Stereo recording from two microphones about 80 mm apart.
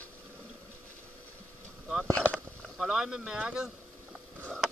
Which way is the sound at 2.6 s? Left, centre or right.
Centre.